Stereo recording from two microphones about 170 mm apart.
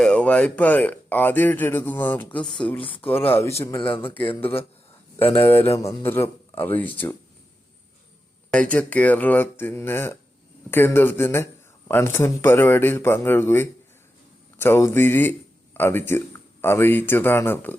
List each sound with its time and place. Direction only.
0.0 s speech: 5° left (ahead or behind)
3.8 s speech: 30° left (ahead or behind)
4.0 s speech: 10° left (ahead or behind)
8.4 s speech: 5° left (ahead or behind)